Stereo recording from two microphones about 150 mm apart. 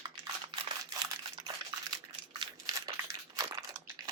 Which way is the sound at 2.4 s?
25° right (ahead or behind).